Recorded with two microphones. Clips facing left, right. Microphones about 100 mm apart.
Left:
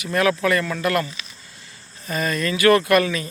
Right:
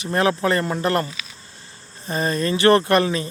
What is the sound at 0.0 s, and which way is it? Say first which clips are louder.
Speech: even; 30° right (ahead or behind).